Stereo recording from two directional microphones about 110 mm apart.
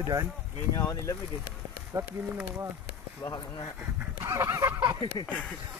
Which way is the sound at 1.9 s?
30° right (ahead or behind).